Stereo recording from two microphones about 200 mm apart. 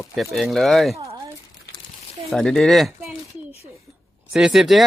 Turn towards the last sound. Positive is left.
turn(degrees=0)  # may be behind; listen again after turning